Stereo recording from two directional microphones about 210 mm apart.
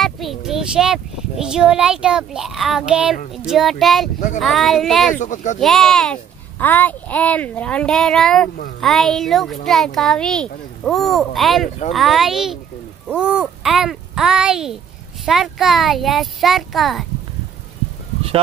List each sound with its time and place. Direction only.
0.0 s a child's voice: centre (ahead or behind)
5.2 s speech: 35° left (ahead or behind)
5.6 s a child's voice: centre (ahead or behind)